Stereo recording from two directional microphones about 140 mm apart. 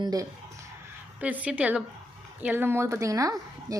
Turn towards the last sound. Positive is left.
turn(degrees=-25)  # may be behind; listen again after turning